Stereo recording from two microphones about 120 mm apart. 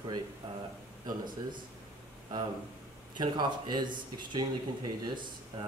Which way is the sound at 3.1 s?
40° right (ahead or behind).